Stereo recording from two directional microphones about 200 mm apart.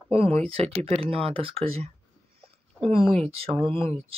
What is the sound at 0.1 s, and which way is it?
Speech, 30° right (ahead or behind).